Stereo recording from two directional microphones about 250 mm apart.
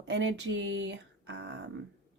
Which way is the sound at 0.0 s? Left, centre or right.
Right.